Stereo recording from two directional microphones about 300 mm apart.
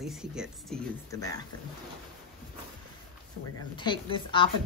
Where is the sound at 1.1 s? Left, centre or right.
Centre.